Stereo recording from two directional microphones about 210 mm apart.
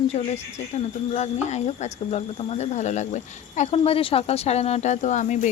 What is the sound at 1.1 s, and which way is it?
A woman's voice, 30° left (ahead or behind).